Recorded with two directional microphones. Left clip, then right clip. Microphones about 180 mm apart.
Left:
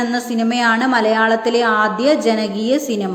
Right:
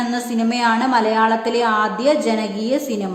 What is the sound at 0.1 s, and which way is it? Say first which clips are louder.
A woman's voice: left 2 dB; 10° left (ahead or behind).